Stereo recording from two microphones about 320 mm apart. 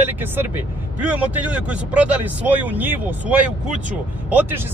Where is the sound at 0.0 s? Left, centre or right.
Centre.